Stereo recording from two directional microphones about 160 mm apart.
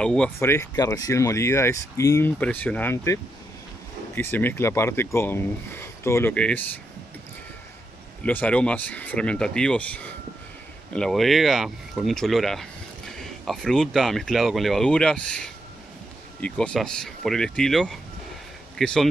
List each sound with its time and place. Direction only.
0.0 s speech: 5° left (ahead or behind)
8.2 s speech: 10° left (ahead or behind)